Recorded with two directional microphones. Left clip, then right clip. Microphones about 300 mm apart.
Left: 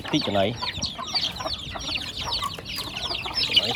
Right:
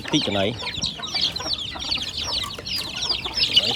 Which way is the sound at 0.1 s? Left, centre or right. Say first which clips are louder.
Right 1 dB; centre.